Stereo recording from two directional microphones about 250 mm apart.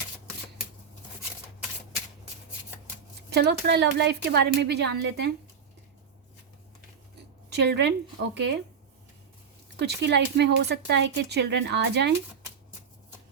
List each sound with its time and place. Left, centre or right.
3.2 s a woman's voice: right
7.5 s a woman's voice: right
9.7 s speech: right